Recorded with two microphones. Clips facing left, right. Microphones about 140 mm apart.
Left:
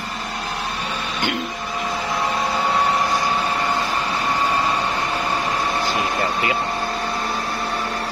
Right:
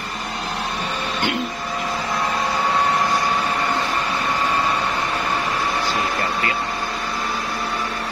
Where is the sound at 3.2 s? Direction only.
15° left (ahead or behind).